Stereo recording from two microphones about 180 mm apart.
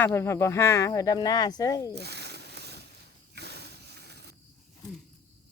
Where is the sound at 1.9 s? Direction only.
65° right (ahead or behind).